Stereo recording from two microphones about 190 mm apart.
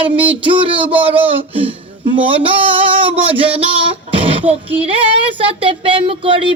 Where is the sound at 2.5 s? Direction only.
30° right (ahead or behind).